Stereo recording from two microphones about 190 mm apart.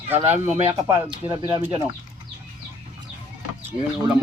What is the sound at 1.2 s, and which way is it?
Speech, 15° right (ahead or behind).